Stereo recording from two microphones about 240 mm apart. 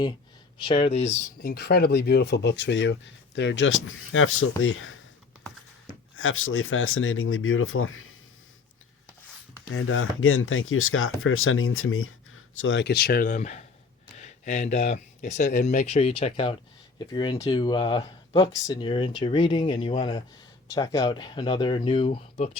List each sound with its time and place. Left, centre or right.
0.6 s speech: left
6.1 s speech: left
9.7 s speech: left